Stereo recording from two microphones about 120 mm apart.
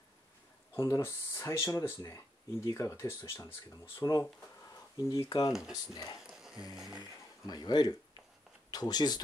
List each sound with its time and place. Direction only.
0.7 s speech: 25° left (ahead or behind)
5.5 s speech: 5° right (ahead or behind)
6.2 s music: 5° right (ahead or behind)
7.0 s speech: 35° left (ahead or behind)